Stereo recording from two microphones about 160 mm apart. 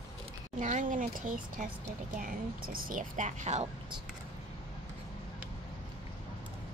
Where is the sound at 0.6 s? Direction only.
50° right (ahead or behind).